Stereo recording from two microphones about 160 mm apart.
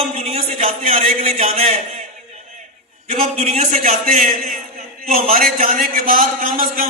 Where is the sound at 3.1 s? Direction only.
40° right (ahead or behind); by 4.6 s 55° right (ahead or behind).